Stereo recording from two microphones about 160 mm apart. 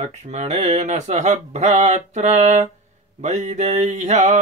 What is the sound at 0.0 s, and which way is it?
Mantra, 45° right (ahead or behind).